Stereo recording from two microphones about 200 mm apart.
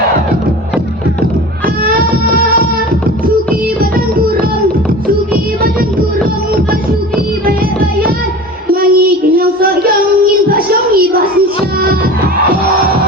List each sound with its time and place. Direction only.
1.6 s music: 45° right (ahead or behind)
8.7 s child singing: 45° right (ahead or behind)
10.5 s music: 50° right (ahead or behind)